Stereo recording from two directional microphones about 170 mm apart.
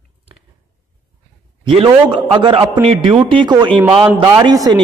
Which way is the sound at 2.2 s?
30° right (ahead or behind).